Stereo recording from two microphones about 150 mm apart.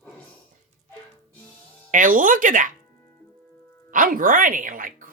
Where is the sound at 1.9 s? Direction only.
65° right (ahead or behind).